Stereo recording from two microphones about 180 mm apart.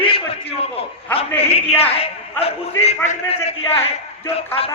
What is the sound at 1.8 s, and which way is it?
A man's voice, 35° left (ahead or behind).